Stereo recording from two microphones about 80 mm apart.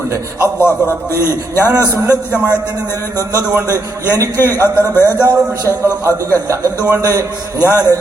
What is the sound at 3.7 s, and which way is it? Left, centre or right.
Speech, right.